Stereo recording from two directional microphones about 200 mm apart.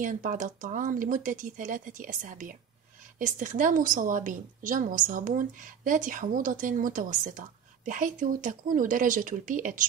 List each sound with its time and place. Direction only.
0.0 s a woman's voice: 40° right (ahead or behind)